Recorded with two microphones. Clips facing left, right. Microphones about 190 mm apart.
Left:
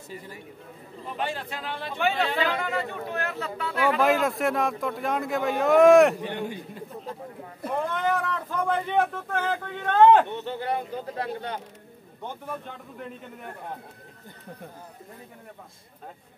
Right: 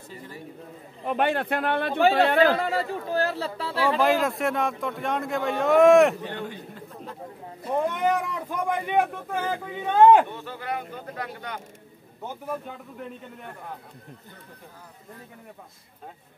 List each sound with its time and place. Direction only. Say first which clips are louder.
1.0 s speech: right 7 dB; 60° right (ahead or behind)
2.4 s speech: right 6 dB; 35° right (ahead or behind)
4.0 s a man's voice: even; centre (ahead or behind)
6.2 s a man's voice: left 2 dB; 15° left (ahead or behind)
7.7 s speech: right 3 dB; 15° right (ahead or behind)
10.3 s speech: left 4 dB; 25° left (ahead or behind)
12.2 s a man's voice: right 3 dB; 5° right (ahead or behind)